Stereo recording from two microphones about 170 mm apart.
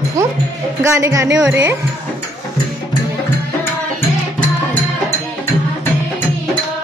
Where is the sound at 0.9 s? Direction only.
15° right (ahead or behind).